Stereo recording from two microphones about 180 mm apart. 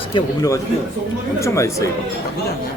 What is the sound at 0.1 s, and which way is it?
A man's voice, 20° left (ahead or behind).